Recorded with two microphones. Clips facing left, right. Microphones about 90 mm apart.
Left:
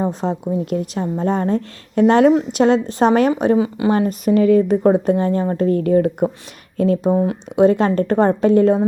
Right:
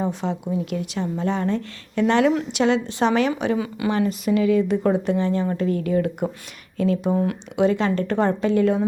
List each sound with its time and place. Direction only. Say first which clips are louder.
0.0 s a woman's voice: left 4 dB; 40° left (ahead or behind)